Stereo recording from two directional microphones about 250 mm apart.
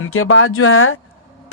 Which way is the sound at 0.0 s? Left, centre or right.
Left.